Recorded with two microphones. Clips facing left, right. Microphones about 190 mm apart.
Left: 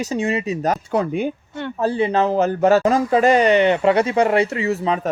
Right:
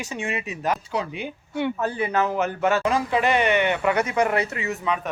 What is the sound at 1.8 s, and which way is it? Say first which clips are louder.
Speech: left 10 dB; 30° left (ahead or behind).